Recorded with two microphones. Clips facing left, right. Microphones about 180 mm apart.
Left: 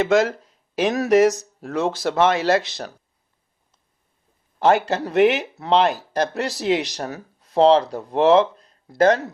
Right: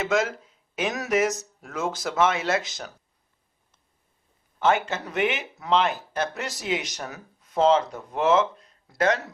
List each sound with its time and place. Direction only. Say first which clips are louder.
0.1 s speech: left 6 dB; 35° left (ahead or behind)
4.6 s speech: left 5 dB; 35° left (ahead or behind)